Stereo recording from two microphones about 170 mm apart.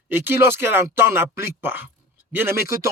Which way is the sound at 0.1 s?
15° right (ahead or behind).